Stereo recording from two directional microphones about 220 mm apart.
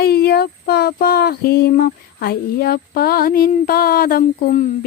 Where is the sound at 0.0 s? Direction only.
45° left (ahead or behind).